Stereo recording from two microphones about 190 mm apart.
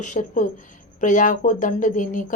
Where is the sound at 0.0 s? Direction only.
40° left (ahead or behind).